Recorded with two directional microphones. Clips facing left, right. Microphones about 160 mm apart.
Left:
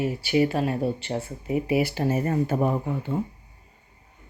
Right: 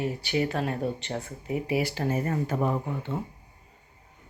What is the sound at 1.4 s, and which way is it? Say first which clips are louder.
Speech: left 4 dB; 15° left (ahead or behind).